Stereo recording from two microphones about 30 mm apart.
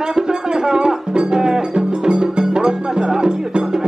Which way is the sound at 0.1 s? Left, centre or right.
Right.